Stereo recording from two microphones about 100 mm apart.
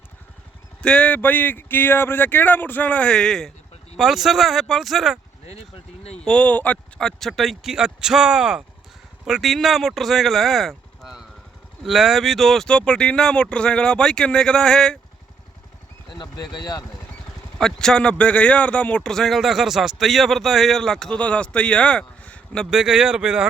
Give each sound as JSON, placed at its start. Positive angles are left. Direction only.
{"t": 0.8, "sound": "speech", "side_deg": 10}
{"t": 5.5, "sound": "speech", "side_deg": 90}
{"t": 6.2, "sound": "a man's voice", "side_deg": 10}
{"t": 7.2, "sound": "a man's voice", "side_deg": 0}
{"t": 16.0, "sound": "a sound", "side_deg": 45}
{"t": 17.6, "sound": "a man's voice", "side_deg": 5}
{"t": 22.7, "sound": "speech", "side_deg": -5}